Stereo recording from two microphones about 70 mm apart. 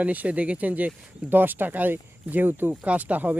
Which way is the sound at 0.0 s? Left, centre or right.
Right.